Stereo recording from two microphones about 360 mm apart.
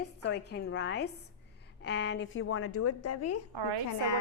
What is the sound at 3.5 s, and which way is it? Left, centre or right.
Speech, right.